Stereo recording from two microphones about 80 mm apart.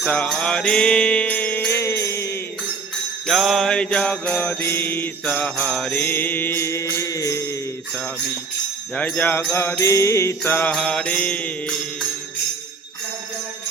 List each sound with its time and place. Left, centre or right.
0.0 s jingle bell: centre
1.7 s jingle bell: left
3.2 s jingle bell: centre; by 7.5 s left
9.0 s mantra: centre
10.7 s mantra: centre
11.6 s music: centre